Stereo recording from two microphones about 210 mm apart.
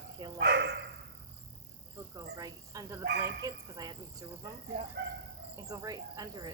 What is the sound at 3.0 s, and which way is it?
Speech, 50° right (ahead or behind).